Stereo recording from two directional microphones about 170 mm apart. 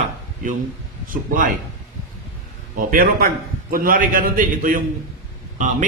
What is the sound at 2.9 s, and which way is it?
A man's voice, 60° right (ahead or behind).